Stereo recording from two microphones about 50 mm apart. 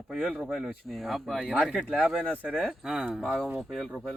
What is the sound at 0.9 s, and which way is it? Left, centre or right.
Speech, centre.